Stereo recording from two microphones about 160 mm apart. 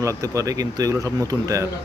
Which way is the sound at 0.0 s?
20° right (ahead or behind).